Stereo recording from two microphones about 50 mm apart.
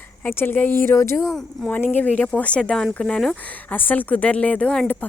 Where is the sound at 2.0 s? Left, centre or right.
Left.